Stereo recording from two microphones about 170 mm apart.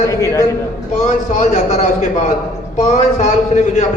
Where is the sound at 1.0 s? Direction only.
45° left (ahead or behind).